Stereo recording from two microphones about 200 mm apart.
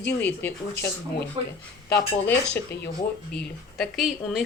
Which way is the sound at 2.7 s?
55° left (ahead or behind).